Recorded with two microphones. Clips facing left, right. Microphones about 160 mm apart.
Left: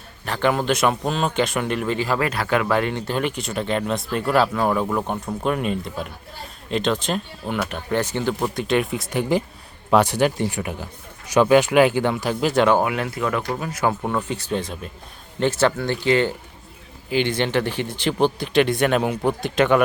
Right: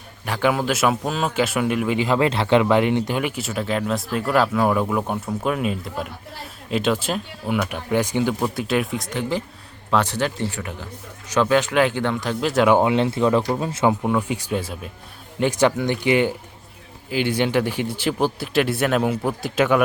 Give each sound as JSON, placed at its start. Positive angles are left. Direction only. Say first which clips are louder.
{"t": 0.3, "sound": "a man's voice", "louder": "even", "side_deg": -5}
{"t": 9.9, "sound": "speech", "louder": "left 4 dB", "side_deg": 10}
{"t": 12.6, "sound": "speech", "louder": "right 2 dB", "side_deg": -20}
{"t": 14.0, "sound": "a man's voice", "louder": "right 3 dB", "side_deg": -10}